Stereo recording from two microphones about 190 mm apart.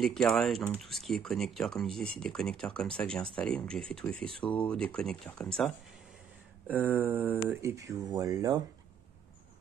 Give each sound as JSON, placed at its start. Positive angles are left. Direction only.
{"t": 0.0, "sound": "speech", "side_deg": 0}
{"t": 6.7, "sound": "speech", "side_deg": -10}